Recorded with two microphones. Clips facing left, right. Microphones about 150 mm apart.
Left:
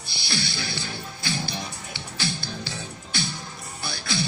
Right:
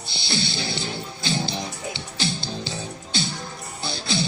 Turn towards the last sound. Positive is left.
turn(degrees=-25)  # may be behind; listen again after turning